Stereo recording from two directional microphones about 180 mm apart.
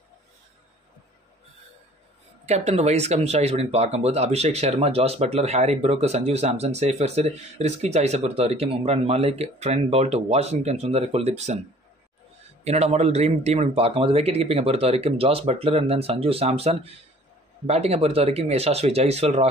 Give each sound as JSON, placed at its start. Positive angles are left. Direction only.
{"t": 2.4, "sound": "speech", "side_deg": -35}
{"t": 12.6, "sound": "speech", "side_deg": -35}